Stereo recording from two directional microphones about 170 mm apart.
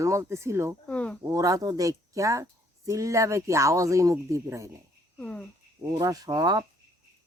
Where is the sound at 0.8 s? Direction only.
5° left (ahead or behind).